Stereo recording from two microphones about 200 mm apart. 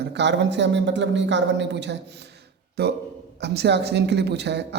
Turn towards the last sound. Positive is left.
turn(degrees=-60)  # may be behind; listen again after turning